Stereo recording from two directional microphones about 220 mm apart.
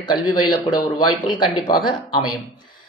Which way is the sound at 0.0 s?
20° left (ahead or behind).